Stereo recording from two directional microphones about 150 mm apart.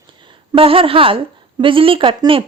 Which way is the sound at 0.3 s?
35° right (ahead or behind).